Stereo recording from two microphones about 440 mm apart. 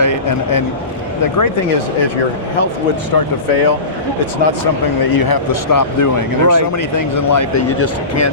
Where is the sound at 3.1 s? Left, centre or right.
Left.